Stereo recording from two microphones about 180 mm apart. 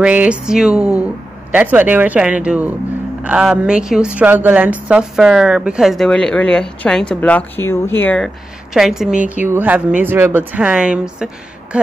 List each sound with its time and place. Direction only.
0.0 s a woman's voice: 5° right (ahead or behind); by 8.3 s 10° left (ahead or behind)
8.7 s a woman's voice: centre (ahead or behind)